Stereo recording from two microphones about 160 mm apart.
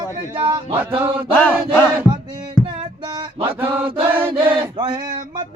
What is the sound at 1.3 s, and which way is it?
Chant, 10° left (ahead or behind).